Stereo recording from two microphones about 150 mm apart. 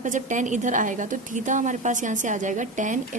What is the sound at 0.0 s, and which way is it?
A woman's voice, 55° right (ahead or behind).